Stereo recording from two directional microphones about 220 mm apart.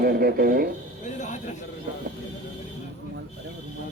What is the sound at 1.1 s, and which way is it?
Music, 35° left (ahead or behind).